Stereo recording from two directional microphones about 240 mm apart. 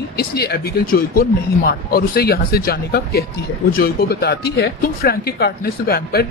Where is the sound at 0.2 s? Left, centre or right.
Left.